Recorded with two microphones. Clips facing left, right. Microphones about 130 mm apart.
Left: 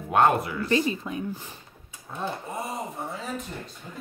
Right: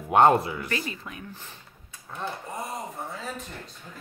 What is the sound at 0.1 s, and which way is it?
Speech, 25° right (ahead or behind).